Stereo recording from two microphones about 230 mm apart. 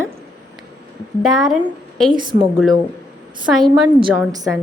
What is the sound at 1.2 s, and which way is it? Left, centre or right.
Speech, centre.